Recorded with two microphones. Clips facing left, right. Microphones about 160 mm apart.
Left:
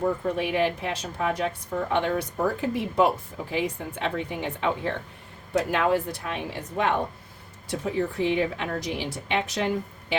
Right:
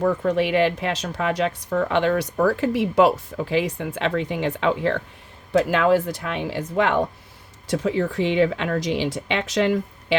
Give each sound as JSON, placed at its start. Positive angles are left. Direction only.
{"t": 0.0, "sound": "speech", "side_deg": -90}